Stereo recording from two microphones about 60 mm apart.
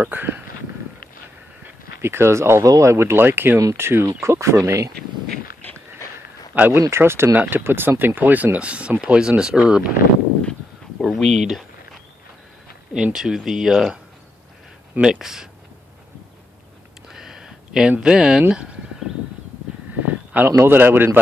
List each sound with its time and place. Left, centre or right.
0.0 s a man's voice: right
2.0 s speech: right
2.6 s speech: right
6.5 s speech: right
6.9 s a man's voice: right; by 9.8 s centre
11.0 s a sound: centre
12.9 s speech: centre
15.0 s speech: centre
17.1 s a sound: centre
18.0 s speech: centre
20.4 s a man's voice: right